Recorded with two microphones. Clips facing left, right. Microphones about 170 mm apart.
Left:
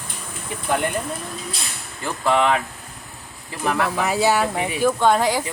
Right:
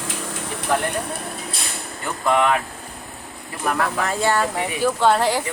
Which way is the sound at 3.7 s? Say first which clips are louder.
Left 2 dB; 5° left (ahead or behind).